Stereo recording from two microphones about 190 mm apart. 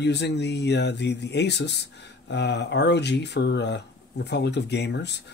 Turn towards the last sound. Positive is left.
turn(degrees=65)  # may be behind; listen again after turning